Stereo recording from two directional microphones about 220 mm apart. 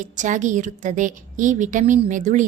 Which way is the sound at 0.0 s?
35° right (ahead or behind).